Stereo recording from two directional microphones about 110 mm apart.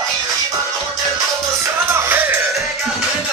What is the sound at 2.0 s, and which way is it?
Music, 20° right (ahead or behind).